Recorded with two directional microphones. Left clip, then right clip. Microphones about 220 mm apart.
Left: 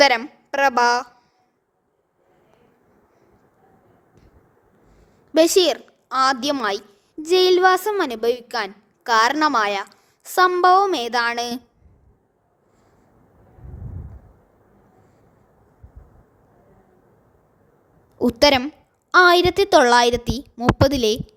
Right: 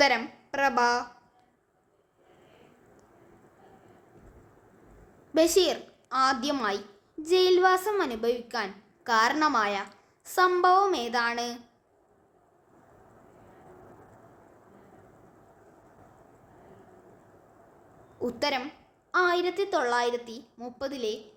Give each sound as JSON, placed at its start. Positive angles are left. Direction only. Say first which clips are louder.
{"t": 0.0, "sound": "a woman's voice", "louder": "left 8 dB", "side_deg": 50}
{"t": 5.3, "sound": "a woman's voice", "louder": "left 7 dB", "side_deg": 45}
{"t": 18.2, "sound": "a woman's voice", "louder": "left 13 dB", "side_deg": 45}